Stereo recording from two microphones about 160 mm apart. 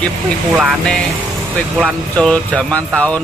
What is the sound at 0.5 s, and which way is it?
Speech, centre (ahead or behind).